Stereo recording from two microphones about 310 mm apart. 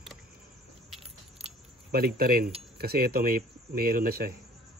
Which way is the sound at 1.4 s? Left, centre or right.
Right.